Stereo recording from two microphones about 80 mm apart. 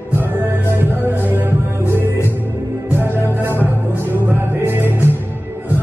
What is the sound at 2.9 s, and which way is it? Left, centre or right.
Music, right.